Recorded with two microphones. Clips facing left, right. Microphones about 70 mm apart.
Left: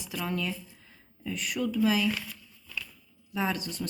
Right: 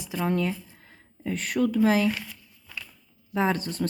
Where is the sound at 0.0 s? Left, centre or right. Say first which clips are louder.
Right 6 dB; right.